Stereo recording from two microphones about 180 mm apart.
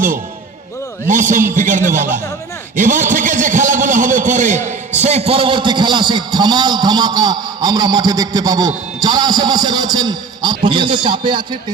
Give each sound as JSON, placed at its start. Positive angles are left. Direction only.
{"t": 1.0, "sound": "a man's voice", "side_deg": -45}